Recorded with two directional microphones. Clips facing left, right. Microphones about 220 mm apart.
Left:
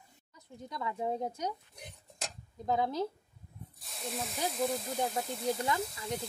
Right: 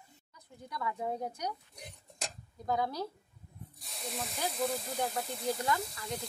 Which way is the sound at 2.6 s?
20° left (ahead or behind).